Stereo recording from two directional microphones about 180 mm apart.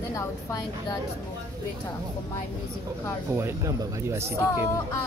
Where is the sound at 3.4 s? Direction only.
20° right (ahead or behind).